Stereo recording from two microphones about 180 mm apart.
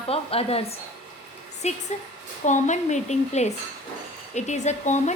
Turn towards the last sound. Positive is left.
turn(degrees=40)  # may be behind; listen again after turning